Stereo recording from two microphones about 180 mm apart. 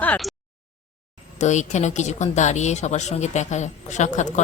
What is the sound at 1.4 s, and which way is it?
A woman's voice, 40° left (ahead or behind).